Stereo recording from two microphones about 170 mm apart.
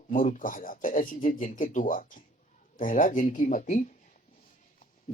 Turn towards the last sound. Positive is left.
turn(degrees=45)  # may be behind; listen again after turning